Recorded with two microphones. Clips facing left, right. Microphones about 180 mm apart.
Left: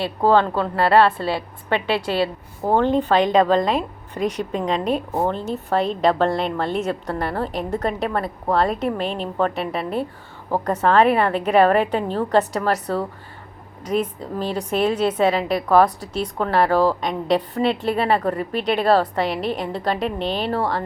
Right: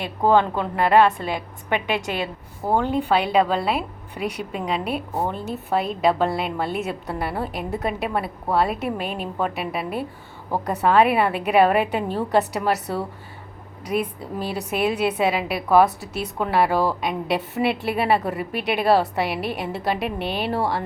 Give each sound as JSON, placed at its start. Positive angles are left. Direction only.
{"t": 0.0, "sound": "a woman's voice", "side_deg": -15}